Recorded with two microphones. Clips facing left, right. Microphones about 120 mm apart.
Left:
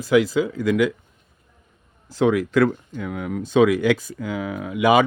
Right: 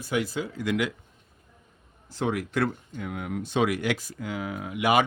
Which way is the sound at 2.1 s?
90° left.